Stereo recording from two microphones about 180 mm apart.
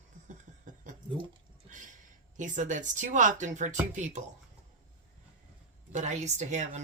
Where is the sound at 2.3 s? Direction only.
45° right (ahead or behind).